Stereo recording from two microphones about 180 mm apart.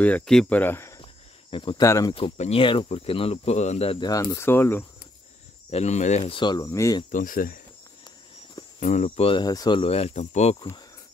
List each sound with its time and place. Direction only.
0.0 s speech: 5° left (ahead or behind)
1.5 s speech: 25° left (ahead or behind)
1.9 s speech: 15° left (ahead or behind)
2.1 s speech: 35° left (ahead or behind)
4.1 s speech: 20° left (ahead or behind)
5.7 s speech: 35° left (ahead or behind); by 7.0 s 20° left (ahead or behind)
7.1 s speech: 50° left (ahead or behind)
8.7 s speech: 40° left (ahead or behind)